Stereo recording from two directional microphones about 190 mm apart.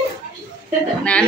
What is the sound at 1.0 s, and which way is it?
Speech, 5° left (ahead or behind).